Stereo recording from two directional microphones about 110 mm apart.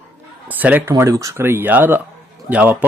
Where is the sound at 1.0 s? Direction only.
30° right (ahead or behind).